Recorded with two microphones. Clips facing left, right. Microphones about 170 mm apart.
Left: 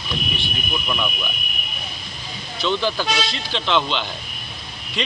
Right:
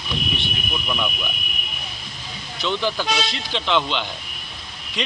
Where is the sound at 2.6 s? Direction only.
15° right (ahead or behind).